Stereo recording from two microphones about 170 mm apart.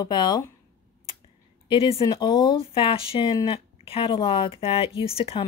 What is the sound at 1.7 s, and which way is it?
Speech, 35° left (ahead or behind).